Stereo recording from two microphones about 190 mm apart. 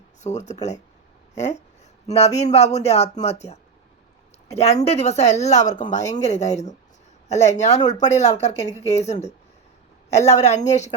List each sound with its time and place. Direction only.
0.2 s speech: 40° left (ahead or behind)
7.8 s speech: 20° left (ahead or behind)
8.0 s speech: 35° left (ahead or behind)